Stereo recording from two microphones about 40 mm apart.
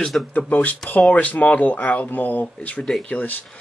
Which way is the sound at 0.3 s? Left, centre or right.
Left.